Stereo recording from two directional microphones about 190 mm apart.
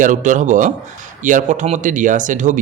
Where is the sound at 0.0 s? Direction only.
40° right (ahead or behind).